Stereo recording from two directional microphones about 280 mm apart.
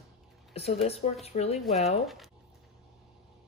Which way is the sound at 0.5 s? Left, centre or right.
Left.